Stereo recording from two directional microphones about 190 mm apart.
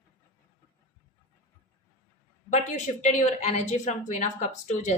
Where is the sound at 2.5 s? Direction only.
40° left (ahead or behind).